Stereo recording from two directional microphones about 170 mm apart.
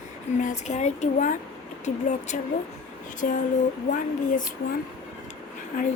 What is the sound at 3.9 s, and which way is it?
Speech, 50° left (ahead or behind).